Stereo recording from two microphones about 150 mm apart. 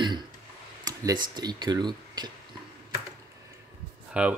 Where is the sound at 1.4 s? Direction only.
30° right (ahead or behind).